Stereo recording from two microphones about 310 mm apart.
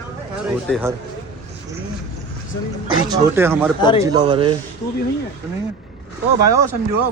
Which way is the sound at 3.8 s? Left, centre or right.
Centre.